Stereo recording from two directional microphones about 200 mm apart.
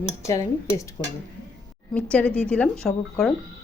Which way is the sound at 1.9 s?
5° left (ahead or behind).